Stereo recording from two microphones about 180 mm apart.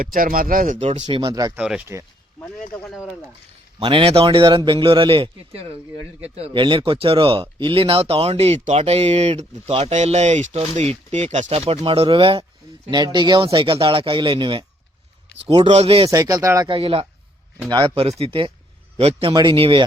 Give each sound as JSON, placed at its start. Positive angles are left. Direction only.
{"t": 0.0, "sound": "speech", "side_deg": -50}
{"t": 0.8, "sound": "a man's voice", "side_deg": -35}
{"t": 1.5, "sound": "speech", "side_deg": -5}
{"t": 3.8, "sound": "a man's voice", "side_deg": -30}
{"t": 16.0, "sound": "speech", "side_deg": -20}
{"t": 16.7, "sound": "a man's voice", "side_deg": -30}